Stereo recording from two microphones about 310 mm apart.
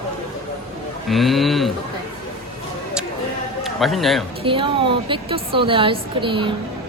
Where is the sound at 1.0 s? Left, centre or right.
Centre.